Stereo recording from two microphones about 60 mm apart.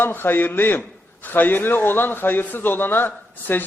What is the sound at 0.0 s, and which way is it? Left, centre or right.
A man's voice, left.